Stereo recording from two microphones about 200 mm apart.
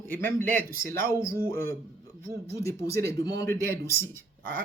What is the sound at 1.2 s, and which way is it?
Speech, 45° right (ahead or behind).